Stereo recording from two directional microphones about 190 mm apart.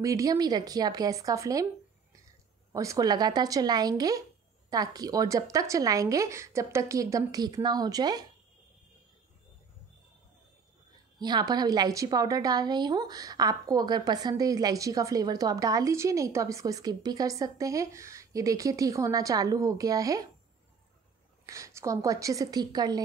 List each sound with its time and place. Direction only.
0.0 s a woman's voice: 20° right (ahead or behind)
2.7 s a woman's voice: 15° right (ahead or behind)
11.1 s a woman's voice: 20° right (ahead or behind)
21.5 s a woman's voice: 15° right (ahead or behind)